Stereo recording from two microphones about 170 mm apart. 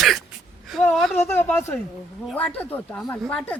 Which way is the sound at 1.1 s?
15° left (ahead or behind).